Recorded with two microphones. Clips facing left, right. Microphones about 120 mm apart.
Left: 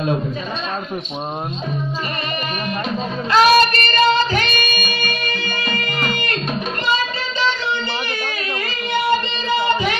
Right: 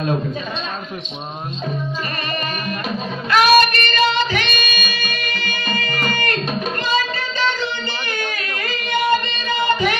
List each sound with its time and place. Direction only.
3.3 s music: 30° left (ahead or behind); by 5.6 s 50° left (ahead or behind)